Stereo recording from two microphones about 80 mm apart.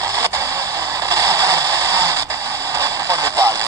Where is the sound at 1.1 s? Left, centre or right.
Right.